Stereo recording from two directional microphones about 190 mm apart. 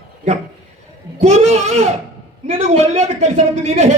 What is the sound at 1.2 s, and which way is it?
A man's voice, 35° right (ahead or behind).